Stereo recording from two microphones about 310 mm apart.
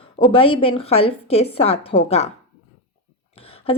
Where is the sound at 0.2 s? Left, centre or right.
Centre.